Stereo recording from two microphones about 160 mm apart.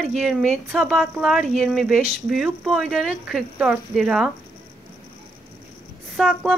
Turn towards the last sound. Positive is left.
turn(degrees=0)  # may be behind; listen again after turning